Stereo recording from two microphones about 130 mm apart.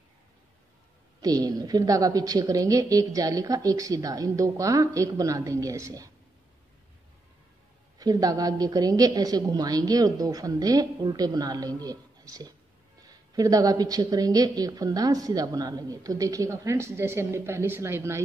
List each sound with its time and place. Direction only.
1.2 s a woman's voice: 30° right (ahead or behind)
8.0 s a woman's voice: 30° right (ahead or behind)